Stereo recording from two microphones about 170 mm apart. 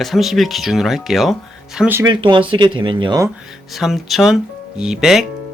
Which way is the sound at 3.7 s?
Centre (ahead or behind).